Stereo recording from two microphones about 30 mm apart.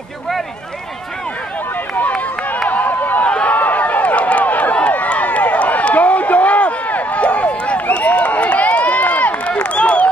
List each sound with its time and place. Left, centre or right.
2.7 s run: left
3.4 s run: left
9.5 s a sound: left